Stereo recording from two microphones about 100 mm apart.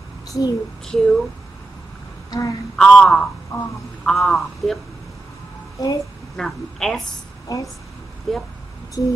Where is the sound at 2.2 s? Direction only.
40° left (ahead or behind).